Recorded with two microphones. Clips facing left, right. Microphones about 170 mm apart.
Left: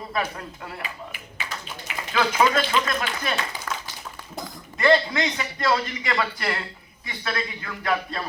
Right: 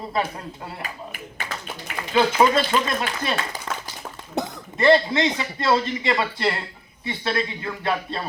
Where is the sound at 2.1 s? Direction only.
30° right (ahead or behind).